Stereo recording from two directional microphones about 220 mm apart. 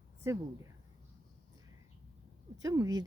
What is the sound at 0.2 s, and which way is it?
Speech, 10° right (ahead or behind).